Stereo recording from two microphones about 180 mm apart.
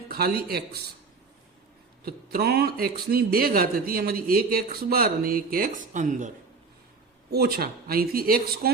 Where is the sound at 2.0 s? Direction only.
60° right (ahead or behind); by 6.3 s 45° right (ahead or behind).